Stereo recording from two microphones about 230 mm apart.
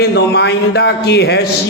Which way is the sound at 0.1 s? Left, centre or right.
Left.